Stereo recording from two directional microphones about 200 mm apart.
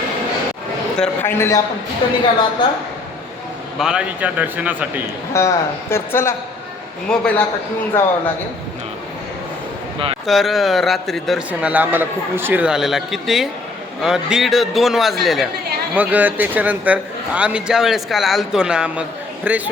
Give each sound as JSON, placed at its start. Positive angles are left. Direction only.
{"t": 0.9, "sound": "a man's voice", "side_deg": 5}
{"t": 2.0, "sound": "a woman's voice", "side_deg": 25}
{"t": 3.8, "sound": "speech", "side_deg": -5}
{"t": 5.3, "sound": "a man's voice", "side_deg": 15}
{"t": 10.2, "sound": "a man's voice", "side_deg": 0}